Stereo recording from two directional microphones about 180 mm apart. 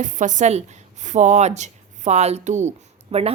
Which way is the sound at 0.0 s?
45° right (ahead or behind).